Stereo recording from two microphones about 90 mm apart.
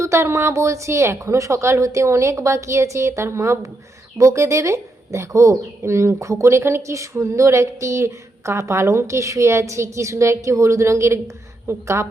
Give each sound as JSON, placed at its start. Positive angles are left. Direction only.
{"t": 0.0, "sound": "a woman's voice", "side_deg": -30}